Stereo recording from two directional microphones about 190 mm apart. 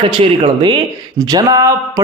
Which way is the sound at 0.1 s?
25° right (ahead or behind).